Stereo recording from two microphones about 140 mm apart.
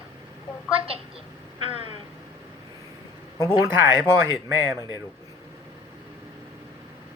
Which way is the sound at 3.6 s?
15° right (ahead or behind).